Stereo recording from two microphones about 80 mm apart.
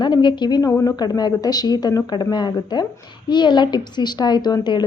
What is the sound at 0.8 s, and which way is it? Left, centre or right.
A woman's voice, left.